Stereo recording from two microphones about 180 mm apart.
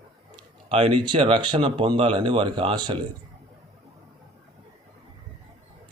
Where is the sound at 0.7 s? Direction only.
30° right (ahead or behind).